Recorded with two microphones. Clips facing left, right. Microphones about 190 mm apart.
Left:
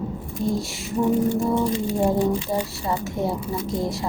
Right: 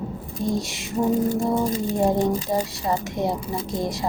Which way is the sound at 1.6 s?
40° right (ahead or behind).